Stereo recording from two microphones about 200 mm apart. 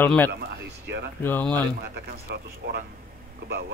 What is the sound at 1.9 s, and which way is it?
Speech, 55° right (ahead or behind).